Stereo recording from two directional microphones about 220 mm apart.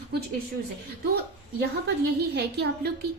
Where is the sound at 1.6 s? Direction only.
50° right (ahead or behind).